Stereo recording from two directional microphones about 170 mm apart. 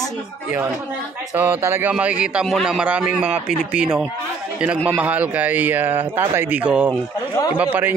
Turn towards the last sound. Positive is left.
turn(degrees=-10)  # may be behind; listen again after turning